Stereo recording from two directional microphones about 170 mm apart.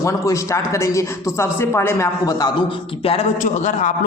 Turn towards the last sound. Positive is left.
turn(degrees=45)  # may be behind; listen again after turning